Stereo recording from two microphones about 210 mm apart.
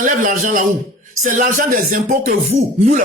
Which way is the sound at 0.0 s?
40° right (ahead or behind).